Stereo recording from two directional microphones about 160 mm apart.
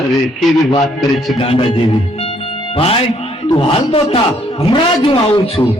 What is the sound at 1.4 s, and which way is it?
A man's voice, 35° left (ahead or behind).